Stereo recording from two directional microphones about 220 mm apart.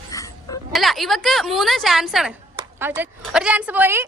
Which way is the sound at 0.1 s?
15° left (ahead or behind).